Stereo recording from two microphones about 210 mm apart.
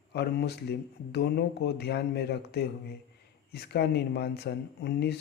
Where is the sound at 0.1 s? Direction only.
50° left (ahead or behind).